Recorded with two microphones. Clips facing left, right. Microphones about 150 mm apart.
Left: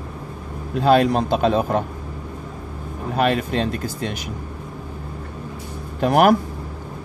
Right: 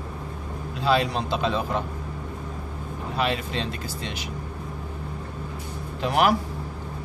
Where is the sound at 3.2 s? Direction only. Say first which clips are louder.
Left 7 dB; 50° left (ahead or behind).